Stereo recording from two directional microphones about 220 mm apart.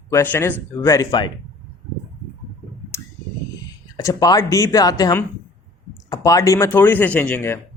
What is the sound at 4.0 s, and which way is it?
Speech, 15° left (ahead or behind).